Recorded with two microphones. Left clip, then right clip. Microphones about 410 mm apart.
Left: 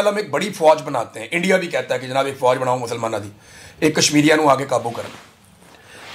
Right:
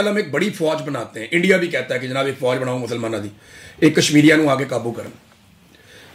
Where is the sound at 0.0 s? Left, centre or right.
Left.